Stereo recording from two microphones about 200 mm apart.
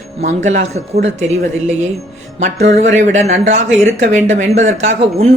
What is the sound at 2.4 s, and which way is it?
Speech, 35° right (ahead or behind).